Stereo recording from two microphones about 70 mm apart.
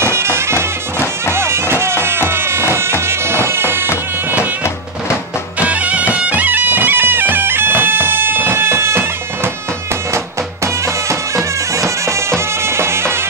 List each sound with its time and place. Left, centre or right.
0.0 s bagpipes: right
1.3 s music: right
5.6 s music: right